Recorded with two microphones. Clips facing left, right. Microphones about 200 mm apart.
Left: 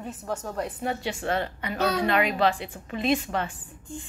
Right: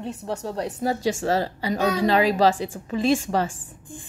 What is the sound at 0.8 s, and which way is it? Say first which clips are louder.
A woman's voice: right 9 dB; 35° right (ahead or behind).